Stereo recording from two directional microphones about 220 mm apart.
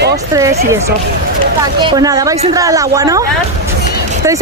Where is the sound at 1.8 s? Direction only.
20° right (ahead or behind).